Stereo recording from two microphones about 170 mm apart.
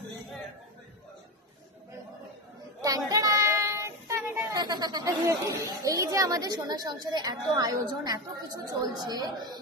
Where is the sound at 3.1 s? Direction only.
20° right (ahead or behind).